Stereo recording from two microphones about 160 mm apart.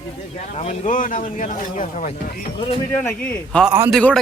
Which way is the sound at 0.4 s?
45° left (ahead or behind).